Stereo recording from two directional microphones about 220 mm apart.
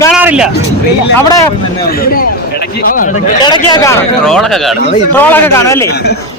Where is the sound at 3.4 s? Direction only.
20° left (ahead or behind).